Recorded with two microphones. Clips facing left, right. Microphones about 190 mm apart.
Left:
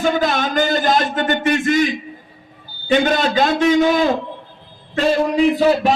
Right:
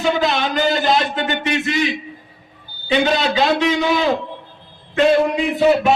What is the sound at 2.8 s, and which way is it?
A man's voice, 50° left (ahead or behind).